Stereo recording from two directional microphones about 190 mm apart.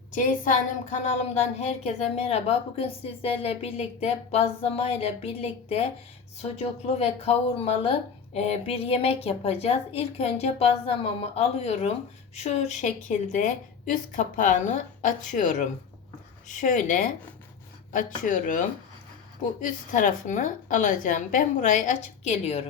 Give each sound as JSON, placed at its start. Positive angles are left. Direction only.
{"t": 0.1, "sound": "a woman's voice", "side_deg": 45}
{"t": 19.6, "sound": "a woman's voice", "side_deg": 40}